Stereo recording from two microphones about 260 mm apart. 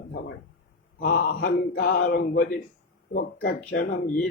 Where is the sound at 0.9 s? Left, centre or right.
Left.